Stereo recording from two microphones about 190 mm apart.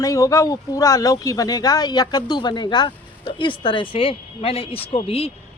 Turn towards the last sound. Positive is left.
turn(degrees=30)  # may be behind; listen again after turning